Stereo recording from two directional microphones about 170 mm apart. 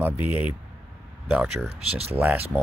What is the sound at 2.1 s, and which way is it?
Speech, 10° right (ahead or behind).